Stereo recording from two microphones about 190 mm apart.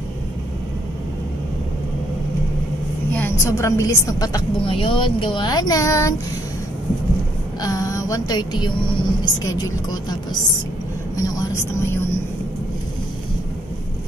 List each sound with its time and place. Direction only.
3.1 s a woman's voice: 10° left (ahead or behind)
7.6 s a woman's voice: 20° left (ahead or behind)
11.2 s speech: 20° left (ahead or behind)